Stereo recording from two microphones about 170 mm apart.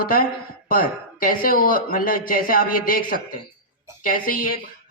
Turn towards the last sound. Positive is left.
turn(degrees=55)  # may be behind; listen again after turning